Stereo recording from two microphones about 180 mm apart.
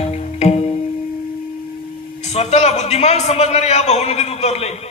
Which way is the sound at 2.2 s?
35° left (ahead or behind).